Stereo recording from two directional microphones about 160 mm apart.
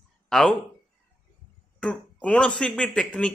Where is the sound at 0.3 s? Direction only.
5° left (ahead or behind).